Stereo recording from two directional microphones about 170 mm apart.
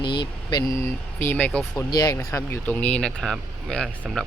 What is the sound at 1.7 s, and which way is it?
Speech, 20° left (ahead or behind).